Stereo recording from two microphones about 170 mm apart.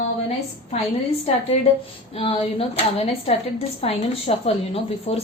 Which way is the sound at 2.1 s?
35° left (ahead or behind).